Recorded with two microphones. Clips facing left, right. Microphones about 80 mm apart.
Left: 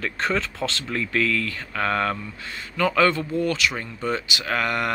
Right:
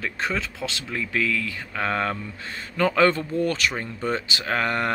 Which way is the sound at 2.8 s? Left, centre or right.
Right.